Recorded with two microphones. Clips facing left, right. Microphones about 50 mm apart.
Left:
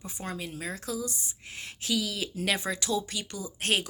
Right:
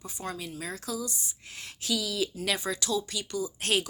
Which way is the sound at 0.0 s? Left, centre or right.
Left.